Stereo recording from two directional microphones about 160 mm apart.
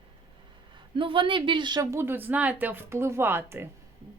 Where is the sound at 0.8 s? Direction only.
30° right (ahead or behind); by 3.7 s 15° right (ahead or behind).